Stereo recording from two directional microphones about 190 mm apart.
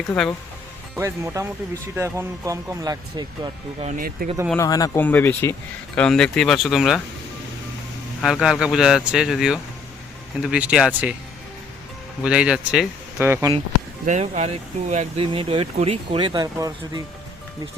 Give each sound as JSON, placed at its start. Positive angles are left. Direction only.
{"t": 0.1, "sound": "speech", "side_deg": 15}
{"t": 0.9, "sound": "speech", "side_deg": -15}
{"t": 3.8, "sound": "speech", "side_deg": -45}
{"t": 4.5, "sound": "speech", "side_deg": 20}
{"t": 8.2, "sound": "speech", "side_deg": 0}
{"t": 12.2, "sound": "speech", "side_deg": -5}
{"t": 14.0, "sound": "speech", "side_deg": -40}